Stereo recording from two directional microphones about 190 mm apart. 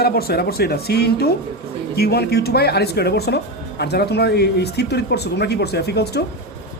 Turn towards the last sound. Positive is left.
turn(degrees=60)  # may be behind; listen again after turning